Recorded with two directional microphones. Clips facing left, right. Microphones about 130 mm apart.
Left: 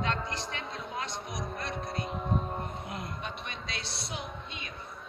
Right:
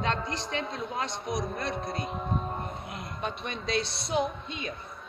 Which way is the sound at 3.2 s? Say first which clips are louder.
Right 7 dB; 30° right (ahead or behind).